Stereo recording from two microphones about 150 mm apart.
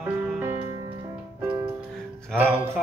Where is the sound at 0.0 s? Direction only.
15° right (ahead or behind).